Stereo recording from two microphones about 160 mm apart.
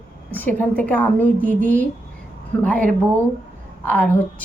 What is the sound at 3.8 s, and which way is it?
Speech, 10° left (ahead or behind).